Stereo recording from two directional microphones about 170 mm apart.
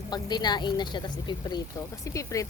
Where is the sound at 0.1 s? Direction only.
25° left (ahead or behind).